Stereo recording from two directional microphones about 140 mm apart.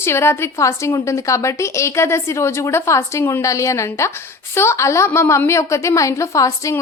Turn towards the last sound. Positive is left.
turn(degrees=20)  # may be behind; listen again after turning